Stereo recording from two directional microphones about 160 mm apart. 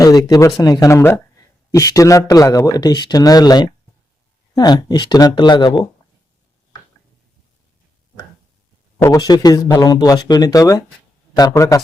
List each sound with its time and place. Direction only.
0.0 s speech: 25° left (ahead or behind)
9.0 s speech: 20° left (ahead or behind)